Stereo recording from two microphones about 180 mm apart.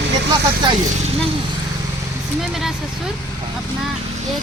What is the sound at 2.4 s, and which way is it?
Speech, centre (ahead or behind).